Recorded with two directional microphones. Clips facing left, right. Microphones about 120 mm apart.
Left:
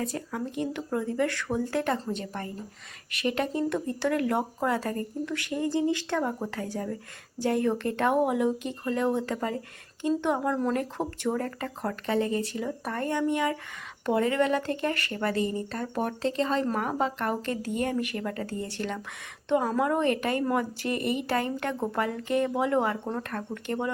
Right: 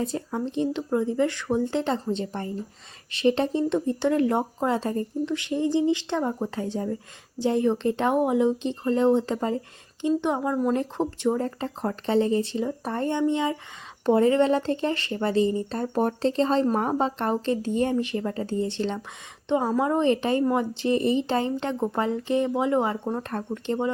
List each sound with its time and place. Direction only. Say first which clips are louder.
0.0 s speech: right 4 dB; 25° right (ahead or behind)